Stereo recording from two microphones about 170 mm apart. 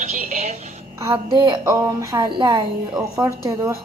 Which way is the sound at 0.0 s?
45° right (ahead or behind).